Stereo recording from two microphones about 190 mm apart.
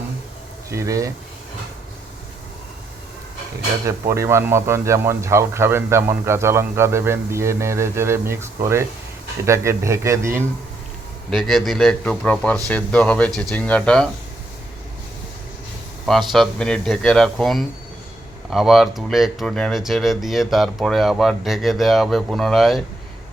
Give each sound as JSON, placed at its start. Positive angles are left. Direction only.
{"t": 0.7, "sound": "speech", "side_deg": -15}
{"t": 4.1, "sound": "speech", "side_deg": -15}
{"t": 11.3, "sound": "speech", "side_deg": 0}
{"t": 16.0, "sound": "speech", "side_deg": 0}